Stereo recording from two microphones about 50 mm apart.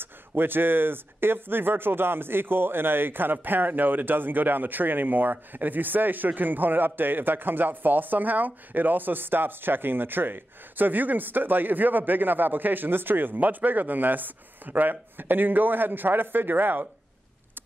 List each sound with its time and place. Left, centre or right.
0.0 s speech: right